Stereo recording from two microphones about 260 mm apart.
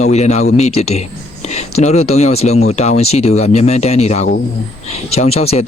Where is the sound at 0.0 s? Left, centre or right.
Left.